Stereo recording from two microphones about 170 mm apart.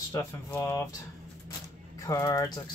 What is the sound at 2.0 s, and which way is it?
Speech, 20° left (ahead or behind).